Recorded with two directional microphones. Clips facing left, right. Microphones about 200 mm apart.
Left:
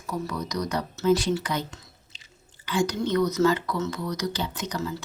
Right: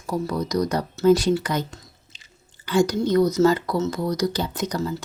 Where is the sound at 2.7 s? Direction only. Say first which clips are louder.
Right 5 dB; 40° right (ahead or behind).